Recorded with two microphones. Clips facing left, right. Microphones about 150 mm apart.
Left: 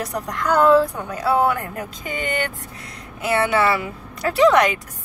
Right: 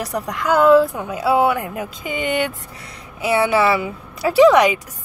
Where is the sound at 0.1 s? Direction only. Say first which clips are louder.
Right 3 dB; 5° right (ahead or behind).